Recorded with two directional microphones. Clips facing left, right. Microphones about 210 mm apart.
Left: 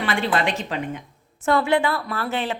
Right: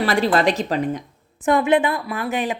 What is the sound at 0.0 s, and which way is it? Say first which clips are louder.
A woman's voice: right 5 dB; 40° right (ahead or behind).